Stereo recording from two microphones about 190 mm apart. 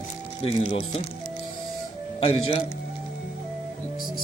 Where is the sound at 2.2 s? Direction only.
35° left (ahead or behind).